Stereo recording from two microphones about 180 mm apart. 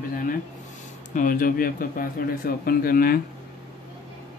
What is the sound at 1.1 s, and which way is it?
Speech, 50° left (ahead or behind).